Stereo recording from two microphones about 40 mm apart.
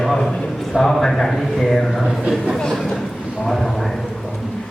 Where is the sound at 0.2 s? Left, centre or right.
Centre.